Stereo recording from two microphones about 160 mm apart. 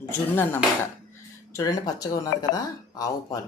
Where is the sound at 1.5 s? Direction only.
25° left (ahead or behind).